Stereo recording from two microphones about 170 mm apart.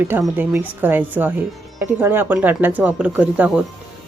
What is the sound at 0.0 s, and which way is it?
A woman's voice, 10° right (ahead or behind).